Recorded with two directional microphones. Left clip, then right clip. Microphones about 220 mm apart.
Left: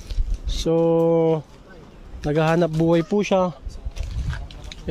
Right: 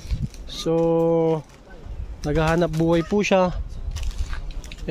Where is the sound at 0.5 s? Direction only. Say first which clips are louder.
Left 1 dB; 10° left (ahead or behind).